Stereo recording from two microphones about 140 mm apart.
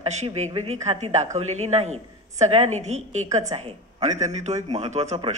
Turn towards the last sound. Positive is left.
turn(degrees=-55)  # may be behind; listen again after turning